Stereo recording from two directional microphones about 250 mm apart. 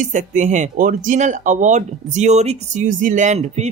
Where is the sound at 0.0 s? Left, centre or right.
Right.